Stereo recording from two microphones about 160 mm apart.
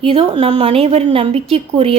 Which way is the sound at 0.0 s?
35° right (ahead or behind).